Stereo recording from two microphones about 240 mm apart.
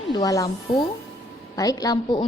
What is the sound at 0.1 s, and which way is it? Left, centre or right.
Speech, centre.